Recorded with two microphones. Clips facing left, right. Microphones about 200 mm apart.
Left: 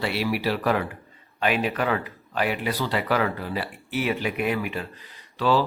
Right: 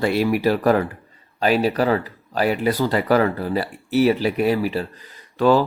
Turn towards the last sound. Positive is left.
turn(degrees=-50)  # may be behind; listen again after turning